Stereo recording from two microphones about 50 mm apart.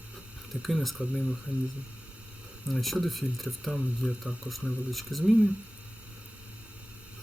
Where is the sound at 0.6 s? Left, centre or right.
Centre.